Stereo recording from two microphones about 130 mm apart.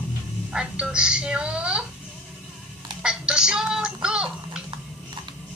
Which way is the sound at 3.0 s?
5° right (ahead or behind).